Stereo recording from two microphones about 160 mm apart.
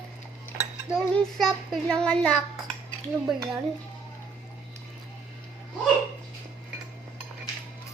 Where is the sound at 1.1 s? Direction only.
Centre (ahead or behind).